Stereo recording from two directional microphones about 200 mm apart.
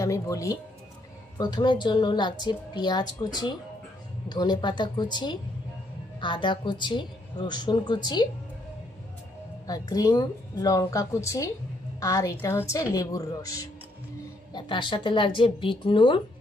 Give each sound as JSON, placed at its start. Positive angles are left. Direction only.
{"t": 0.0, "sound": "a woman's voice", "side_deg": 15}
{"t": 9.7, "sound": "a woman's voice", "side_deg": 20}